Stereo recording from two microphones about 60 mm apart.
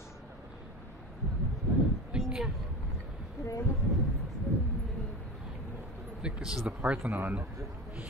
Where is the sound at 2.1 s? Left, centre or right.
Centre.